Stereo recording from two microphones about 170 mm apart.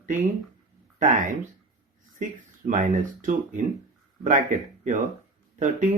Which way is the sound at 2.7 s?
50° right (ahead or behind).